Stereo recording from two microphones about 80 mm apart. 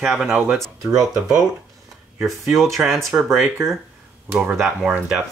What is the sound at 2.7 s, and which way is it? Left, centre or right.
Speech, centre.